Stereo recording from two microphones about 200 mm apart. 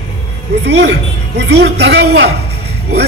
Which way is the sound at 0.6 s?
60° right (ahead or behind).